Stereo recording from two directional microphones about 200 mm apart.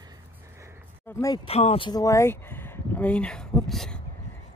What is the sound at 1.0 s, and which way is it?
Speech, 20° left (ahead or behind).